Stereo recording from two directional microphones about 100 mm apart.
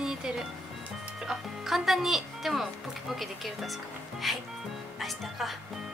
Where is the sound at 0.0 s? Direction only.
5° right (ahead or behind).